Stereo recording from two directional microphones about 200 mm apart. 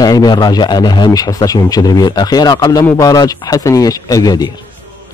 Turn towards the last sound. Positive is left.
turn(degrees=20)  # may be behind; listen again after turning